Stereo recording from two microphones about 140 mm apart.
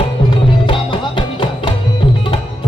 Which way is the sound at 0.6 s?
35° left (ahead or behind).